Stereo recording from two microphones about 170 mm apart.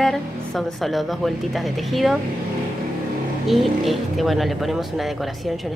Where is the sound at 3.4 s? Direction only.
Centre (ahead or behind).